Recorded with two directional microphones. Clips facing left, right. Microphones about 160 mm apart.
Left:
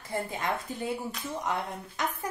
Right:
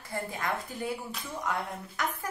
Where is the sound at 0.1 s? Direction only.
20° left (ahead or behind).